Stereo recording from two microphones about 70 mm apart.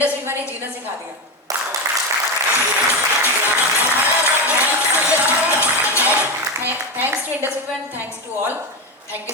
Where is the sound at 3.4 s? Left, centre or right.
Right.